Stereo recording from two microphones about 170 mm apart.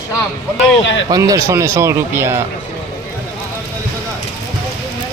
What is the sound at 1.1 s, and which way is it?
Speech, 20° right (ahead or behind).